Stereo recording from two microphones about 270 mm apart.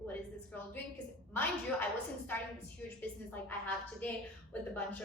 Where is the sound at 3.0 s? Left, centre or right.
Centre.